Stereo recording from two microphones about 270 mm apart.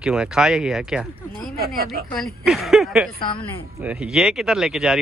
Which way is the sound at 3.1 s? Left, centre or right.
Centre.